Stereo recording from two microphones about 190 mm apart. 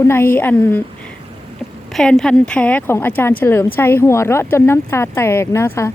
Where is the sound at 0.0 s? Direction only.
10° left (ahead or behind).